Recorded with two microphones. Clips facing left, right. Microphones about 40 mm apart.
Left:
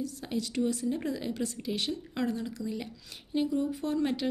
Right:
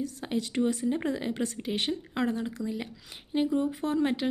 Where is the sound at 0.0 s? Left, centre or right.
Right.